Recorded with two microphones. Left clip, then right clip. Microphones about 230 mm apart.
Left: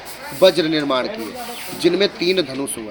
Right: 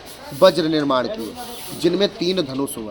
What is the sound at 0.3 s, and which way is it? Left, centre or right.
A man's voice, right.